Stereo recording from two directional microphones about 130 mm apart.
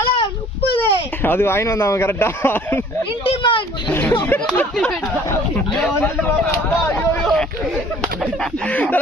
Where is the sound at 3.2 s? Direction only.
40° left (ahead or behind).